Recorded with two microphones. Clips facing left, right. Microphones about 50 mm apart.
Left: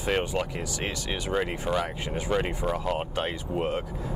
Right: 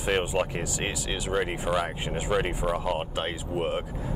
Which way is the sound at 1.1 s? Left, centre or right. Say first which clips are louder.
Even; centre.